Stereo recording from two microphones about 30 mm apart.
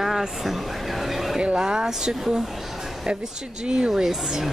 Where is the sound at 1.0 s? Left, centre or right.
Centre.